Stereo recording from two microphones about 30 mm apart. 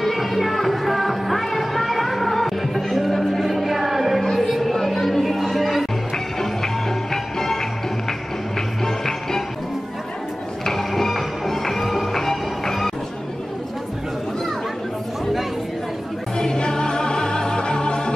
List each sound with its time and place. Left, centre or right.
0.0 s music: centre
4.4 s a sound: centre
5.2 s music: centre
6.4 s music: centre
8.8 s music: centre
10.6 s music: centre
16.3 s music: left